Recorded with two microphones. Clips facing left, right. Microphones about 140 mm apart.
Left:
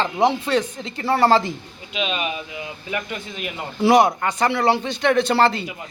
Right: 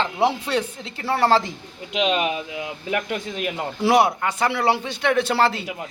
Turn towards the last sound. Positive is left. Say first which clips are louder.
# left 2 dB
turn(degrees=-5)  # may be behind; listen again after turning